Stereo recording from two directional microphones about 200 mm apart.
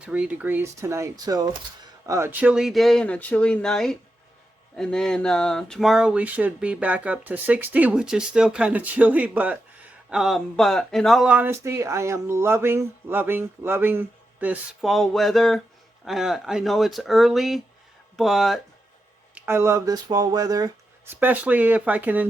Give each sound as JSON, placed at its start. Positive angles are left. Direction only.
{"t": 0.0, "sound": "speech", "side_deg": -5}
{"t": 19.3, "sound": "speech", "side_deg": -10}